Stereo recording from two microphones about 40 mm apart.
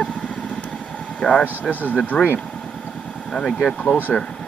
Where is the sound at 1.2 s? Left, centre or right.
Left.